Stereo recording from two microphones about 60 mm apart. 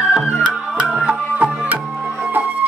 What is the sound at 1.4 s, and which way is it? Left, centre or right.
Music, right.